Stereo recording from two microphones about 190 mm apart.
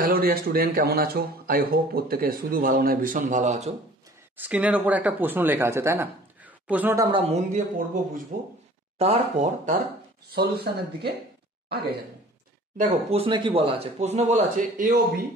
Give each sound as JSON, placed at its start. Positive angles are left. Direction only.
{"t": 0.0, "sound": "speech", "side_deg": -50}
{"t": 4.4, "sound": "speech", "side_deg": -5}
{"t": 7.1, "sound": "speech", "side_deg": -30}
{"t": 8.9, "sound": "speech", "side_deg": -35}
{"t": 10.3, "sound": "speech", "side_deg": -55}
{"t": 12.7, "sound": "speech", "side_deg": -35}